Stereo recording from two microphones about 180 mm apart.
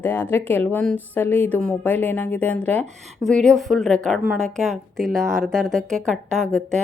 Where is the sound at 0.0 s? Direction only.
10° left (ahead or behind).